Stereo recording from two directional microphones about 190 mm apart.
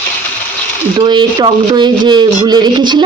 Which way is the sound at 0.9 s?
25° right (ahead or behind).